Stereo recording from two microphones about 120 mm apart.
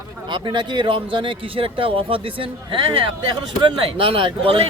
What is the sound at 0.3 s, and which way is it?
Speech, 40° right (ahead or behind).